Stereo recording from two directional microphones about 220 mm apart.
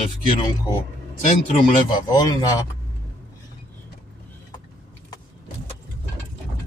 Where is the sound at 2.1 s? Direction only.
15° left (ahead or behind).